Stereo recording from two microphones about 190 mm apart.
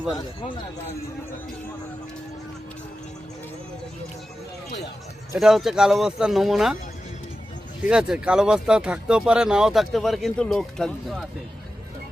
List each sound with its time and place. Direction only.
0.4 s a man's voice: 25° left (ahead or behind)
5.4 s speech: centre (ahead or behind)
7.9 s speech: 5° right (ahead or behind)